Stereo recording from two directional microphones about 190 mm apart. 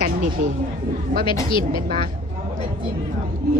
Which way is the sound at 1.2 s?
25° left (ahead or behind).